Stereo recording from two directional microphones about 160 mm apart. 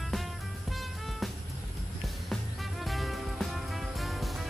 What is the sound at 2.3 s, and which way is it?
Music, centre (ahead or behind).